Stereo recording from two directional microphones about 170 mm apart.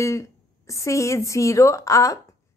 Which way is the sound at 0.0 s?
15° left (ahead or behind).